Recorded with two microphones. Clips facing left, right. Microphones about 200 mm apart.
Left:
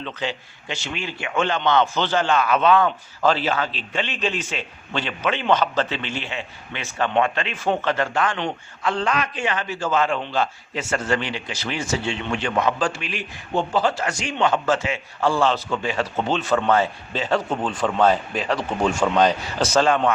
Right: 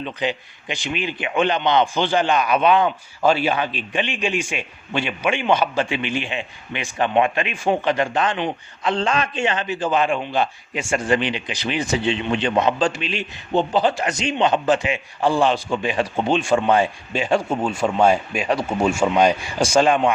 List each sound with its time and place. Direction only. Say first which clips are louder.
0.0 s a man's voice: right 4 dB; 15° right (ahead or behind)